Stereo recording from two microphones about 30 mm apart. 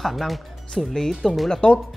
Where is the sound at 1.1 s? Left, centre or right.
Centre.